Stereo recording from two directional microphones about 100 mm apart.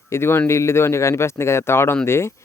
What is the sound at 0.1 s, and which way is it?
Speech, 25° left (ahead or behind).